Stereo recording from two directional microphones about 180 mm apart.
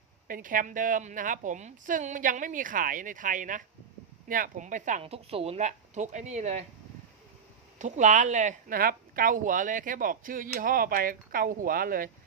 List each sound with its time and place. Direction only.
0.3 s speech: 50° right (ahead or behind)
7.8 s speech: 40° right (ahead or behind)